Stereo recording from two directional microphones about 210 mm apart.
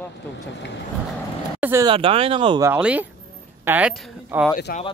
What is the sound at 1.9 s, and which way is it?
Speech, 25° right (ahead or behind).